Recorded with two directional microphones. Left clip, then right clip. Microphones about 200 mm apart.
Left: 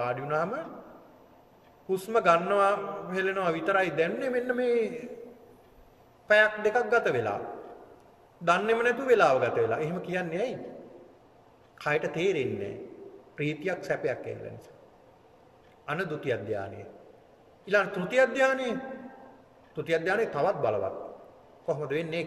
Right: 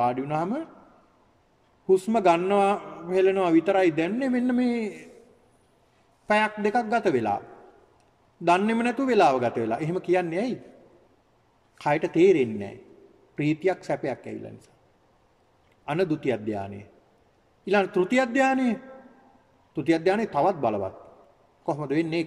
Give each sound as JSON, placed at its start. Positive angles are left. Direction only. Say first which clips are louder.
{"t": 0.0, "sound": "a man's voice", "louder": "right 4 dB", "side_deg": -40}
{"t": 1.9, "sound": "a man's voice", "louder": "right 3 dB", "side_deg": -40}
{"t": 6.2, "sound": "a man's voice", "louder": "left 1 dB", "side_deg": -40}
{"t": 8.5, "sound": "a man's voice", "louder": "right 2 dB", "side_deg": -40}
{"t": 11.8, "sound": "a man's voice", "louder": "right 7 dB", "side_deg": -40}
{"t": 15.8, "sound": "a man's voice", "louder": "right 6 dB", "side_deg": -40}
{"t": 17.6, "sound": "a man's voice", "louder": "right 4 dB", "side_deg": -40}